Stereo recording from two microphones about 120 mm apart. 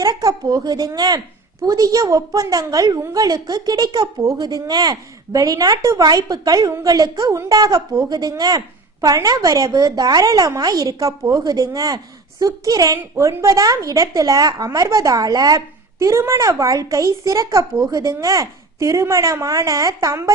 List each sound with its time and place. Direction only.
0.0 s a woman's voice: 30° right (ahead or behind)